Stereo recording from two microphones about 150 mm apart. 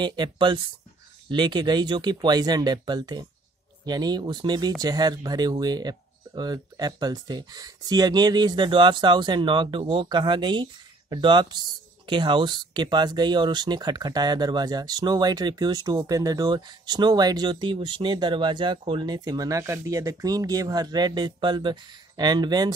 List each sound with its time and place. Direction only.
0.0 s speech: 30° right (ahead or behind)